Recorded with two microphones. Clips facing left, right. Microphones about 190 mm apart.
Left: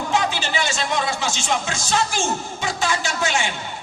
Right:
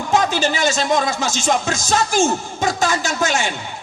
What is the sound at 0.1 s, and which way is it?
Speech, 45° right (ahead or behind).